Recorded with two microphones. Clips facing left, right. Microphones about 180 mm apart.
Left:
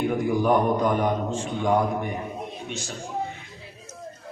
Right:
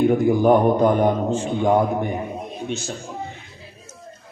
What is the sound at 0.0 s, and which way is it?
A man's voice, 30° right (ahead or behind).